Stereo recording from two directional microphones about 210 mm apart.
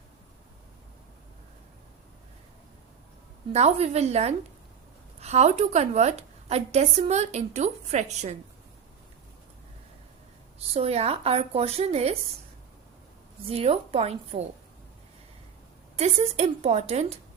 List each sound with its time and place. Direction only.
3.5 s a woman's voice: 30° right (ahead or behind)
10.8 s a woman's voice: 30° right (ahead or behind)
13.5 s a woman's voice: 30° right (ahead or behind)
16.0 s a woman's voice: 30° right (ahead or behind)